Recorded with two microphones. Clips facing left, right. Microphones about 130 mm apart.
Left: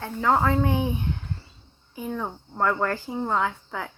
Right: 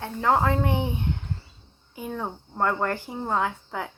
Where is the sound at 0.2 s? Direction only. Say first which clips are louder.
Left 1 dB; 30° right (ahead or behind).